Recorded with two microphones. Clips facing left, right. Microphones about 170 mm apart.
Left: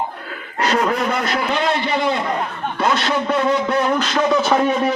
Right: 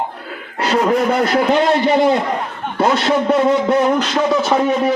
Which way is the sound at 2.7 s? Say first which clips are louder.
Right 5 dB; 30° right (ahead or behind).